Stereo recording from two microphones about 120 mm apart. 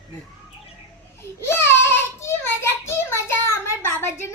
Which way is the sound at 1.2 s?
20° left (ahead or behind).